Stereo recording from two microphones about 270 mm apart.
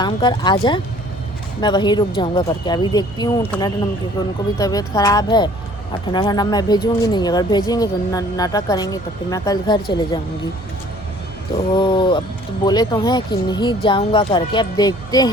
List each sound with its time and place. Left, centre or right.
0.0 s speech: centre
11.8 s speech: centre